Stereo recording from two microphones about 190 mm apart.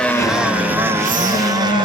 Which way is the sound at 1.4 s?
20° right (ahead or behind).